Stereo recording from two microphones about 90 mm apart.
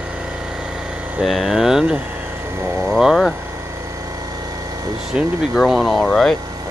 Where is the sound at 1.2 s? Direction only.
Centre (ahead or behind).